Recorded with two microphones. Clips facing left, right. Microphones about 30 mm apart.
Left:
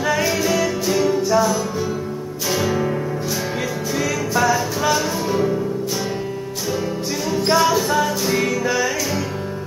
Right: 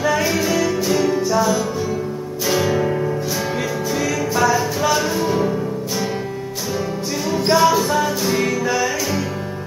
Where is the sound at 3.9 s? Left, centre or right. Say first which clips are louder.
Even; centre.